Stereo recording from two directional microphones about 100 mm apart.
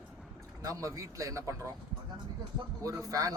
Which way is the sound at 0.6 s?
35° right (ahead or behind).